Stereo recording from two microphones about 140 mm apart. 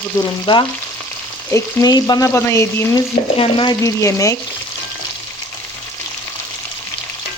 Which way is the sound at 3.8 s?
20° left (ahead or behind).